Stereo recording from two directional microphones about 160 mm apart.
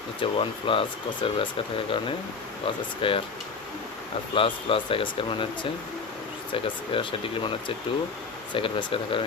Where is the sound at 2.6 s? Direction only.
35° left (ahead or behind).